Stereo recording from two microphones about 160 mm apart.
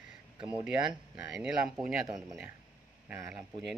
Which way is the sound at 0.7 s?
5° right (ahead or behind).